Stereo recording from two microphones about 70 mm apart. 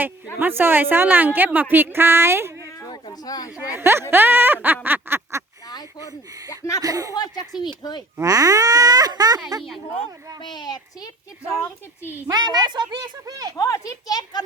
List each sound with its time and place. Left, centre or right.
0.3 s speech: right
2.8 s a sound: left
3.7 s speech: right
6.5 s speech: left
6.8 s speech: right
7.1 s speech: left
7.6 s speech: left
8.2 s speech: right
10.4 s speech: left
11.6 s speech: left
12.3 s a woman's voice: right
13.6 s speech: left